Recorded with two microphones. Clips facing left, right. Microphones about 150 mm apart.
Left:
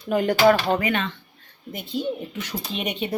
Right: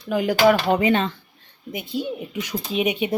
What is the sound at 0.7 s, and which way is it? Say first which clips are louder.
Speech: right 4 dB; 25° right (ahead or behind).